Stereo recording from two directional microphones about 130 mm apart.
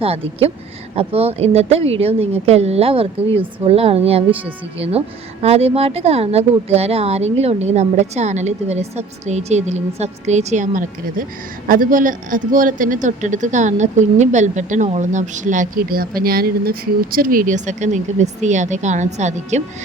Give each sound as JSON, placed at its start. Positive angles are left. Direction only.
{"t": 0.0, "sound": "a woman's voice", "side_deg": -50}
{"t": 16.1, "sound": "speech", "side_deg": -90}